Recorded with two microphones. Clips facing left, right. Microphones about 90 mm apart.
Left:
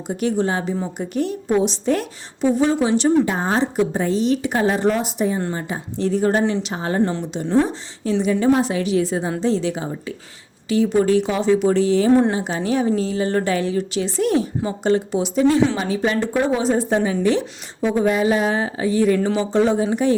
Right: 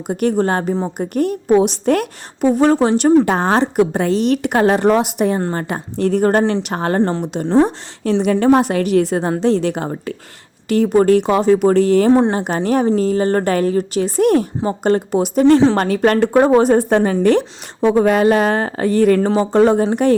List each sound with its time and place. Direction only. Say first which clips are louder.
0.1 s a woman's voice: right 4 dB; 55° right (ahead or behind)
3.2 s a woman's voice: right 5 dB; 70° right (ahead or behind)